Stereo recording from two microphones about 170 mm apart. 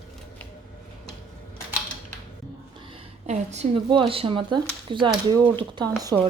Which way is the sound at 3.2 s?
40° right (ahead or behind).